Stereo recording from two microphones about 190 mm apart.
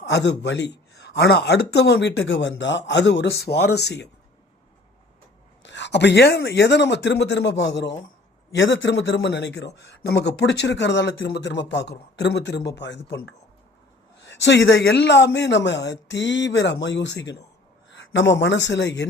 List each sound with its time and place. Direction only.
0.1 s a man's voice: 65° left (ahead or behind)
5.6 s a man's voice: 70° left (ahead or behind)